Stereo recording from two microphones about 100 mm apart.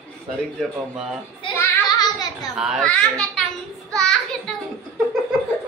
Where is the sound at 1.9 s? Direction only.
40° left (ahead or behind).